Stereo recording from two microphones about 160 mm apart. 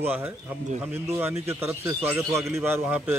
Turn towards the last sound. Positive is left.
turn(degrees=-10)  # may be behind; listen again after turning